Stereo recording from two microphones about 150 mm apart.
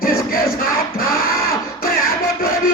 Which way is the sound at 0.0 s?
75° left (ahead or behind).